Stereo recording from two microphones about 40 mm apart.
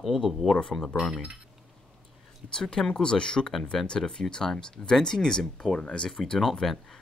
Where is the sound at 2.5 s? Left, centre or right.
Centre.